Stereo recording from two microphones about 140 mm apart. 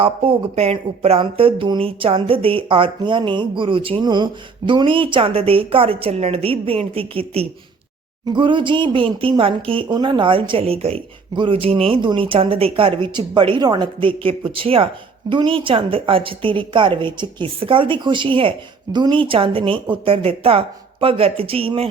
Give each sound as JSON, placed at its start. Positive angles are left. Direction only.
{"t": 0.0, "sound": "speech", "side_deg": -40}